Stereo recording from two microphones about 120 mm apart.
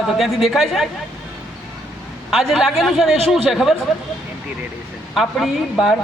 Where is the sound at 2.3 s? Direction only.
Centre (ahead or behind).